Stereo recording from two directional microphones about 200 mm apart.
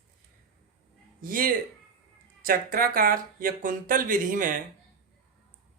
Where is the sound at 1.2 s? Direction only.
45° right (ahead or behind).